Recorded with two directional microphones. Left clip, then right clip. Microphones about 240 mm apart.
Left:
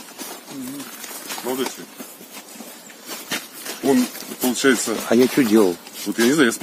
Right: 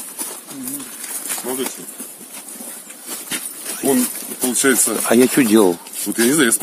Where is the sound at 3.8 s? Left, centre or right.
Right.